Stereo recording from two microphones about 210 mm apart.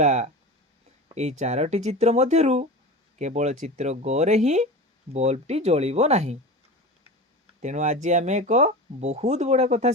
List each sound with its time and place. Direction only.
0.0 s speech: 35° right (ahead or behind)
7.6 s speech: 35° right (ahead or behind)